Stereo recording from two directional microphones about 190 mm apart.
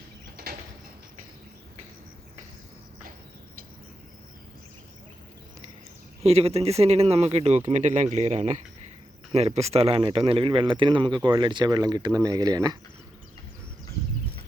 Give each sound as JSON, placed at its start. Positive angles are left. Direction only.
{"t": 6.2, "sound": "speech", "side_deg": -30}